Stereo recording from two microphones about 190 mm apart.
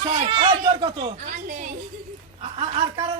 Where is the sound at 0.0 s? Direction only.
40° right (ahead or behind).